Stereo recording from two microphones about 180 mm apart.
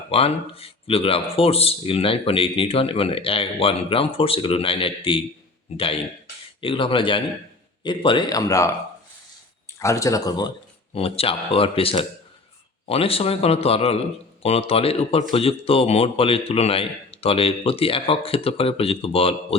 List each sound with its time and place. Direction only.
0.1 s speech: 35° left (ahead or behind)
10.9 s speech: 30° left (ahead or behind)